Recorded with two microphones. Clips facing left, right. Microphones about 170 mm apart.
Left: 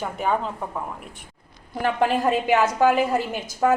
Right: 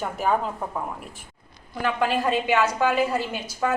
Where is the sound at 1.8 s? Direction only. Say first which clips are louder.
Left 2 dB; 40° left (ahead or behind).